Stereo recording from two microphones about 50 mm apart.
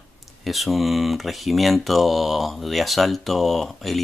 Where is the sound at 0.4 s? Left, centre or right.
Centre.